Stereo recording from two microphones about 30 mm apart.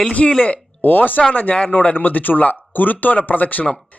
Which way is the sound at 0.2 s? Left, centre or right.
Left.